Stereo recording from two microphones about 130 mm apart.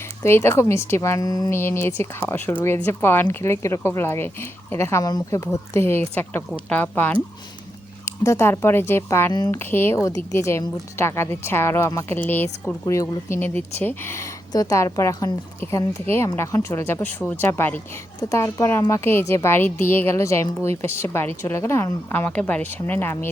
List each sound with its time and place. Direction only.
0.2 s a woman's voice: 20° left (ahead or behind)
14.5 s a woman's voice: 25° left (ahead or behind)